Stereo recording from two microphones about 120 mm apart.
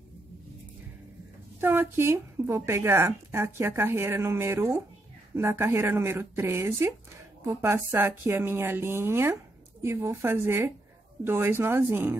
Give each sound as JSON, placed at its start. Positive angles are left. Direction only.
{"t": 1.6, "sound": "speech", "side_deg": -20}